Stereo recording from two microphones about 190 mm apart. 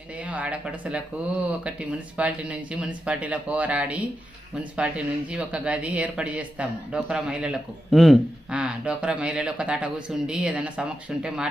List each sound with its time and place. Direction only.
0.2 s speech: 5° right (ahead or behind)